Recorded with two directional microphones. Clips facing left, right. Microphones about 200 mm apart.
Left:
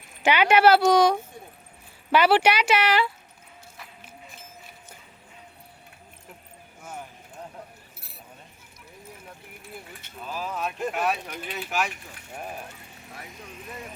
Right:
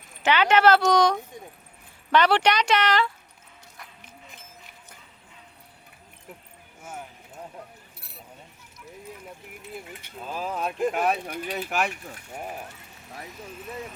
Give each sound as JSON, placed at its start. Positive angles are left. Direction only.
{"t": 0.2, "sound": "speech", "side_deg": 10}
{"t": 9.9, "sound": "speech", "side_deg": -15}
{"t": 10.2, "sound": "speech", "side_deg": -30}
{"t": 10.8, "sound": "speech", "side_deg": -15}
{"t": 11.1, "sound": "speech", "side_deg": -40}